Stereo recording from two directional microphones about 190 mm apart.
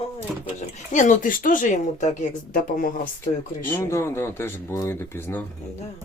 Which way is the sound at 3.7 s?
15° left (ahead or behind).